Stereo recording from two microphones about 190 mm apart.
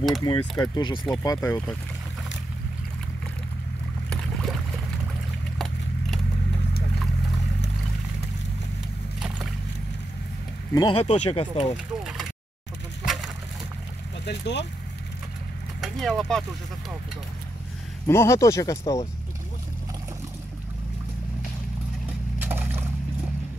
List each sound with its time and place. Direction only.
0.2 s speech: 20° left (ahead or behind)
4.1 s boat: centre (ahead or behind)
5.6 s a sound: centre (ahead or behind)
10.7 s speech: 25° left (ahead or behind)
11.7 s speech: centre (ahead or behind)
13.0 s a sound: centre (ahead or behind)
14.2 s speech: 65° left (ahead or behind)
15.8 s speech: centre (ahead or behind)
18.0 s speech: 15° left (ahead or behind)
22.4 s wood: 10° right (ahead or behind)